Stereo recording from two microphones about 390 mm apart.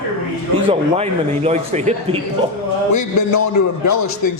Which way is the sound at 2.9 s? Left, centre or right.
Left.